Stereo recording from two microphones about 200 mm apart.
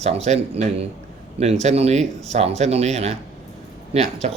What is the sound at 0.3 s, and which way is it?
Speech, 30° right (ahead or behind).